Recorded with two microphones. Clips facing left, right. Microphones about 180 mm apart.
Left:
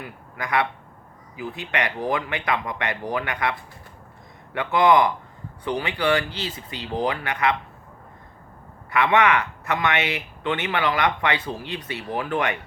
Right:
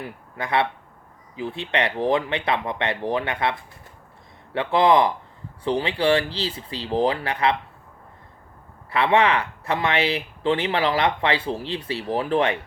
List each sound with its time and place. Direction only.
0.0 s speech: 30° right (ahead or behind)
4.5 s speech: 30° right (ahead or behind)
8.9 s speech: 30° right (ahead or behind)